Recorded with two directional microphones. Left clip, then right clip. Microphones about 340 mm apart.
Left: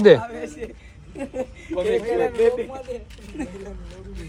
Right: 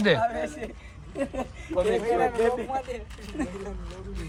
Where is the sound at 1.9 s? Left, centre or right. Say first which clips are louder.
Left 4 dB; centre.